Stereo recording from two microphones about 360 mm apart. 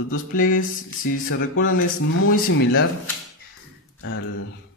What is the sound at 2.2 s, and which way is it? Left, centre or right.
Speech, left.